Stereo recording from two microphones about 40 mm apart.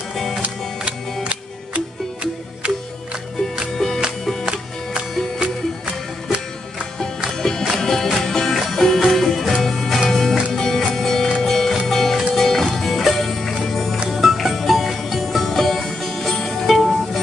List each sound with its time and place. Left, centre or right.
0.4 s music: right
3.7 s music: centre
7.2 s music: centre
8.5 s music: centre
16.7 s music: centre